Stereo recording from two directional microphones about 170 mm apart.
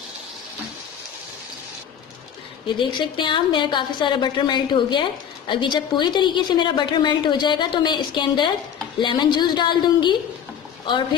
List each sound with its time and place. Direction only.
2.6 s a woman's voice: 25° left (ahead or behind)